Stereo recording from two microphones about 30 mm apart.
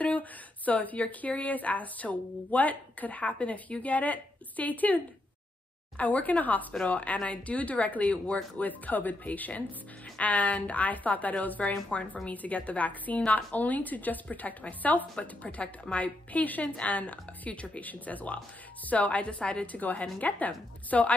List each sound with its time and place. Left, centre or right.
0.0 s a sound: left
1.2 s speech: left
6.9 s speech: left
8.5 s speech: left
11.9 s a woman's voice: left
12.3 s speech: left
15.6 s a woman's voice: left
16.0 s speech: left
16.6 s a woman's voice: left
16.9 s a woman's voice: left
19.7 s speech: left